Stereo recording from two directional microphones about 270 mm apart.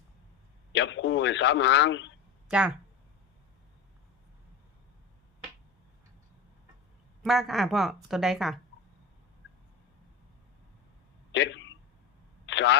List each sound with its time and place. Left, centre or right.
0.7 s a man's voice: left
2.5 s a woman's voice: centre
7.3 s a woman's voice: centre
11.3 s a sound: left